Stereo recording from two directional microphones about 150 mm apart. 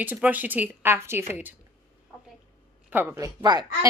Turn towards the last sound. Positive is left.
turn(degrees=-25)  # may be behind; listen again after turning